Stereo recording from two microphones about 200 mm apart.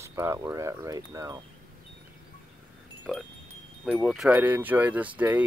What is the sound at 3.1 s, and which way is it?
Wind chime, 5° left (ahead or behind).